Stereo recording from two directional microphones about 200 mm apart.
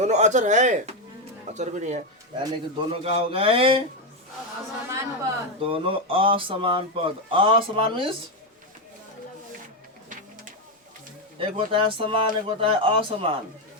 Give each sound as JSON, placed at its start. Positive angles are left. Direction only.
{"t": 0.0, "sound": "speech", "side_deg": -35}
{"t": 2.4, "sound": "speech", "side_deg": -20}
{"t": 5.5, "sound": "speech", "side_deg": -25}
{"t": 11.3, "sound": "speech", "side_deg": -25}